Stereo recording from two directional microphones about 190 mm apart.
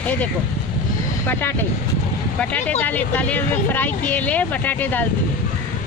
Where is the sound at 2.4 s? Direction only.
10° left (ahead or behind).